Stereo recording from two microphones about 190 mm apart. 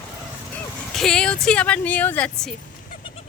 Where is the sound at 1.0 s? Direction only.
5° left (ahead or behind).